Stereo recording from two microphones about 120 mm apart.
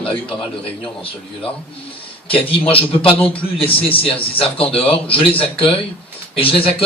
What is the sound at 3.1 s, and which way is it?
Speech, 15° left (ahead or behind).